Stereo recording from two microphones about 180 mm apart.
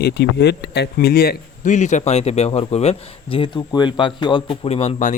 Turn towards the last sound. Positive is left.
turn(degrees=40)  # may be behind; listen again after turning